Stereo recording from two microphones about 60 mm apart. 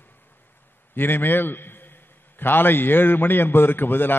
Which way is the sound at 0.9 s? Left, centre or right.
Left.